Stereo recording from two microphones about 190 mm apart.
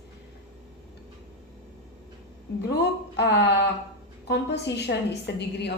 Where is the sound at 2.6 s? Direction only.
65° left (ahead or behind).